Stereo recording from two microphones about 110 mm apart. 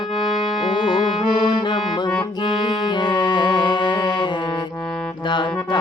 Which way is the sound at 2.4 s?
45° left (ahead or behind).